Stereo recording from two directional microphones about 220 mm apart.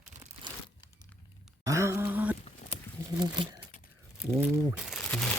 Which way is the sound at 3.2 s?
20° right (ahead or behind).